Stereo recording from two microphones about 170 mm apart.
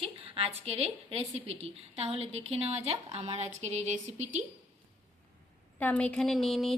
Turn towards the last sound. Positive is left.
turn(degrees=0)  # may be behind; listen again after turning